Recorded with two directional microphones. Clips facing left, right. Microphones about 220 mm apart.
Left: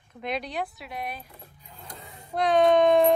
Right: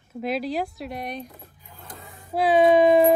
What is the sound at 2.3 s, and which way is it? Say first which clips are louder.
Speech: right 3 dB; 5° right (ahead or behind).